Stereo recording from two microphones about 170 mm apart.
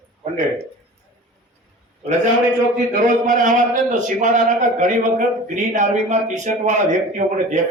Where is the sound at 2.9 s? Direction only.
50° right (ahead or behind).